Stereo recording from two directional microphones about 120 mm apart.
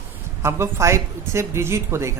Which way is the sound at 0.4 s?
25° right (ahead or behind).